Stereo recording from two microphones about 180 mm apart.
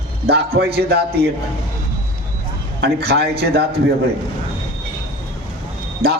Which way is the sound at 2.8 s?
65° right (ahead or behind).